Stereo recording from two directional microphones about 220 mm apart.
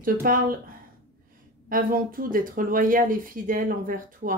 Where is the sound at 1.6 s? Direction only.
40° right (ahead or behind).